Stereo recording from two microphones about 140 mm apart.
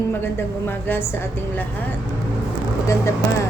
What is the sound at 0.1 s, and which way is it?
A woman's voice, 15° left (ahead or behind).